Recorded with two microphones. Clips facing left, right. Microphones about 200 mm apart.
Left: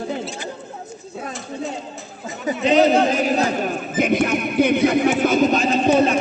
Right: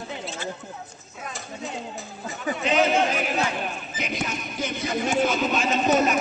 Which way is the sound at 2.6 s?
35° left (ahead or behind).